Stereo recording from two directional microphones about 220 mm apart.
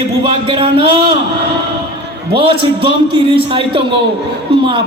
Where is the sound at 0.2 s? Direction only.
25° right (ahead or behind).